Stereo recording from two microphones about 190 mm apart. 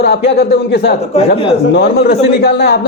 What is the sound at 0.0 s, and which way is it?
A man's voice, 60° left (ahead or behind).